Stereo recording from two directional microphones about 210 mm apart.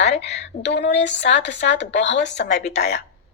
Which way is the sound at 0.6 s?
55° left (ahead or behind).